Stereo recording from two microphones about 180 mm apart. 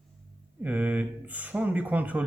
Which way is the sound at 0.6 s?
10° right (ahead or behind).